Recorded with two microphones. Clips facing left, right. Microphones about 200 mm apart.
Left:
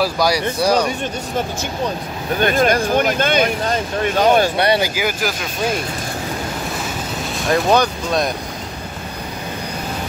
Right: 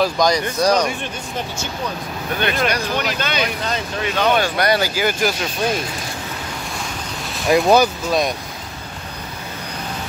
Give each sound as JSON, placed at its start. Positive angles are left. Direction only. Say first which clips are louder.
{"t": 0.0, "sound": "speech", "louder": "even", "side_deg": 10}
{"t": 2.3, "sound": "speech", "louder": "left 5 dB", "side_deg": 45}
{"t": 4.8, "sound": "speech", "louder": "right 1 dB", "side_deg": 10}
{"t": 7.4, "sound": "speech", "louder": "right 2 dB", "side_deg": -10}